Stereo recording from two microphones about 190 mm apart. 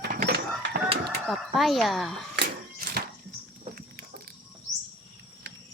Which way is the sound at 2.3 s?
55° right (ahead or behind).